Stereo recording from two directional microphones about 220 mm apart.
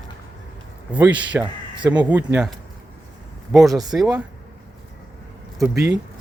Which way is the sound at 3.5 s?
Centre (ahead or behind).